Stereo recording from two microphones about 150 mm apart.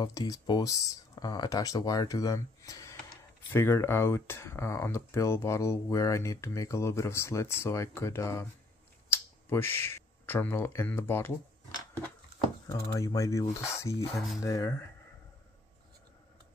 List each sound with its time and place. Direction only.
0.0 s speech: 25° left (ahead or behind)
12.6 s speech: 15° left (ahead or behind)